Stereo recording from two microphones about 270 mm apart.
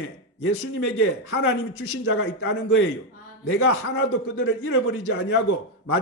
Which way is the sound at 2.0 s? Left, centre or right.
Left.